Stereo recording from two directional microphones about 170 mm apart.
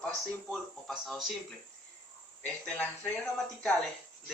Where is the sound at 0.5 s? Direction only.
Centre (ahead or behind).